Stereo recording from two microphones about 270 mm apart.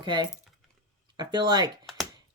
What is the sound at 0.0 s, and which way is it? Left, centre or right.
Speech, centre.